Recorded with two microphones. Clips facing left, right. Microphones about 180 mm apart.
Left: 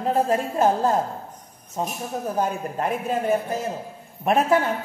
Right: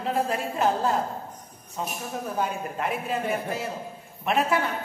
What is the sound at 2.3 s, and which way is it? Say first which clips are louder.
A man's voice: left 3 dB; 40° left (ahead or behind).